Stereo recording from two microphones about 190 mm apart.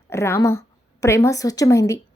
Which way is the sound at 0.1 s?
15° left (ahead or behind).